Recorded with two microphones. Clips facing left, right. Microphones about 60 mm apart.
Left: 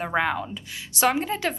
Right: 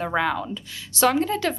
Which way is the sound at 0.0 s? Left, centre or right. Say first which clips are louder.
Right 1 dB; left.